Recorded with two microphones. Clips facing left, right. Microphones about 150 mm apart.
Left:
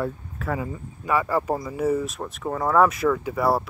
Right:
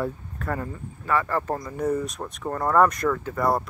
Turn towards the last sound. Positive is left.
turn(degrees=5)  # may be behind; listen again after turning